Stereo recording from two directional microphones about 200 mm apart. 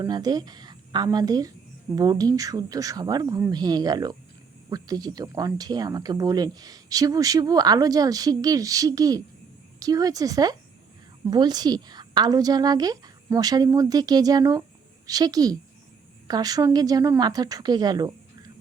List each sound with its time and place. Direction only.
0.0 s speech: 20° right (ahead or behind)